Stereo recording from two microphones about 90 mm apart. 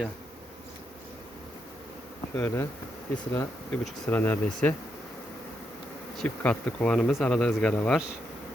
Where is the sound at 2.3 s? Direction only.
20° left (ahead or behind).